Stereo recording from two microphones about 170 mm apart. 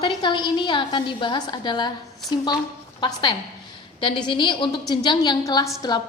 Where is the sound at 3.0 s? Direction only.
25° left (ahead or behind).